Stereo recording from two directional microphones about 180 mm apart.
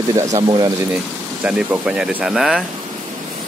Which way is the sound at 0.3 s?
30° right (ahead or behind).